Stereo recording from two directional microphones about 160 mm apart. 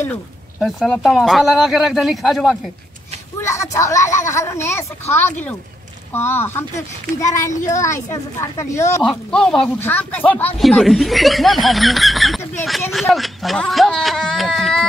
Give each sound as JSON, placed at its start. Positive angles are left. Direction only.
{"t": 0.6, "sound": "speech", "side_deg": 0}
{"t": 3.3, "sound": "speech", "side_deg": 20}
{"t": 6.1, "sound": "speech", "side_deg": 15}
{"t": 9.3, "sound": "speech", "side_deg": 5}